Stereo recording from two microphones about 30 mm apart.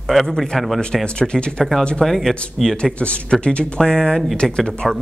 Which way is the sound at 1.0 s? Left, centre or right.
Left.